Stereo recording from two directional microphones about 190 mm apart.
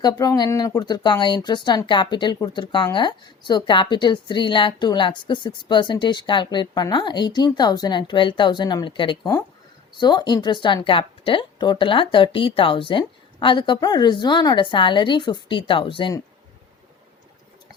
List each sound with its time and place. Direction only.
0.0 s speech: 20° left (ahead or behind)